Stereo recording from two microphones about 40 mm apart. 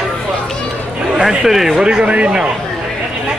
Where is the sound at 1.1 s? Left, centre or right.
Centre.